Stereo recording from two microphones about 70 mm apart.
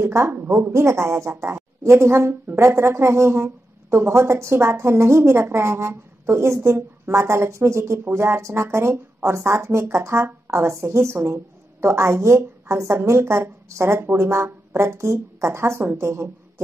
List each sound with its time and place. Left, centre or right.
0.0 s a woman's voice: right